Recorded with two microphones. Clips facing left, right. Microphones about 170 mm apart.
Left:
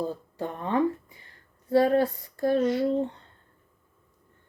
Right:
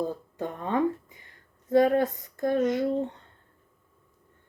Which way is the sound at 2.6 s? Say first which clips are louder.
Even; 20° right (ahead or behind).